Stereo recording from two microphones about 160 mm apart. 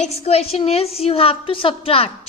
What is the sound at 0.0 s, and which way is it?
A woman's voice, 40° left (ahead or behind).